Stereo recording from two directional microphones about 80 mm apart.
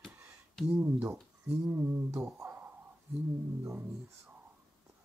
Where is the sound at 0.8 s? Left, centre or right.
Right.